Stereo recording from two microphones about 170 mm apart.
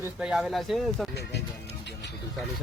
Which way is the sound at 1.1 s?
75° left (ahead or behind).